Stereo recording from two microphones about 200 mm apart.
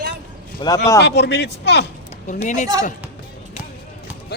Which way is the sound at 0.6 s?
20° left (ahead or behind).